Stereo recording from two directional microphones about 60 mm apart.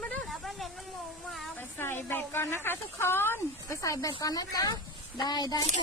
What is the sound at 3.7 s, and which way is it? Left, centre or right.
Speech, left.